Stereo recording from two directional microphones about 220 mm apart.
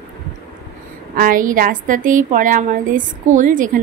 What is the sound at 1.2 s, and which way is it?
A woman's voice, 40° right (ahead or behind).